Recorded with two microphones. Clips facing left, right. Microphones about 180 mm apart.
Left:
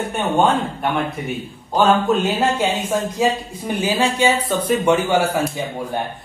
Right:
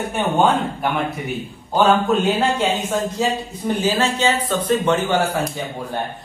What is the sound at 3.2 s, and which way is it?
Speech, 10° left (ahead or behind).